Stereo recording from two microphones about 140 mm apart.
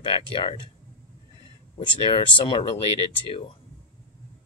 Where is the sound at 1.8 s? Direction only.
35° left (ahead or behind).